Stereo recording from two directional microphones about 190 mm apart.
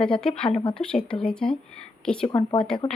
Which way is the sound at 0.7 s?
5° left (ahead or behind).